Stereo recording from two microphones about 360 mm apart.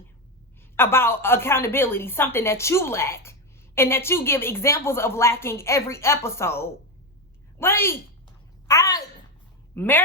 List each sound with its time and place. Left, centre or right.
0.8 s a woman's voice: centre